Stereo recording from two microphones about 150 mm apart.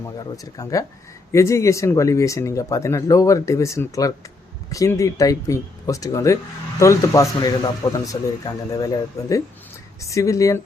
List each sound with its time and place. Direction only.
0.0 s speech: 25° left (ahead or behind)